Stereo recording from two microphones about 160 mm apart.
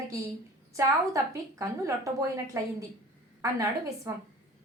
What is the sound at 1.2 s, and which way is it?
A woman's voice, 20° right (ahead or behind).